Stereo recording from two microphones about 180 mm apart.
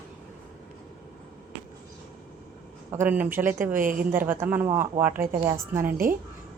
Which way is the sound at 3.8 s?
50° right (ahead or behind).